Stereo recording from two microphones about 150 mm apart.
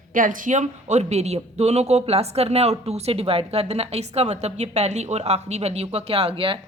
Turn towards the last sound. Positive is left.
turn(degrees=-35)  # may be behind; listen again after turning